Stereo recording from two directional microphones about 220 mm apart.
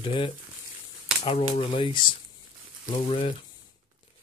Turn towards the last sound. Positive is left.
turn(degrees=25)  # may be behind; listen again after turning